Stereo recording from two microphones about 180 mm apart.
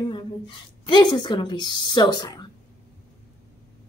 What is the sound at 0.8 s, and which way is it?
A child's voice, 25° left (ahead or behind).